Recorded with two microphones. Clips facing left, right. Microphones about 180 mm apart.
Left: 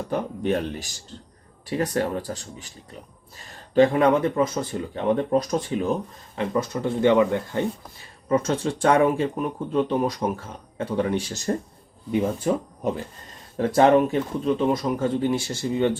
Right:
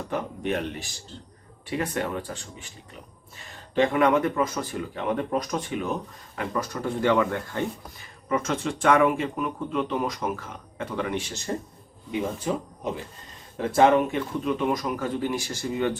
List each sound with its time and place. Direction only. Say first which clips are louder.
0.1 s speech: left 4 dB; 35° left (ahead or behind)
12.4 s speech: left 5 dB; 45° left (ahead or behind); by 16.0 s 25° left (ahead or behind)